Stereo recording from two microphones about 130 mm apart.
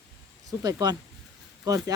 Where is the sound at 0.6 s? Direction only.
30° right (ahead or behind).